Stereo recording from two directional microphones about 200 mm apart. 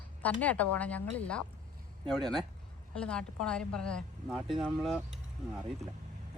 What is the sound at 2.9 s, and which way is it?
Speech, 5° left (ahead or behind).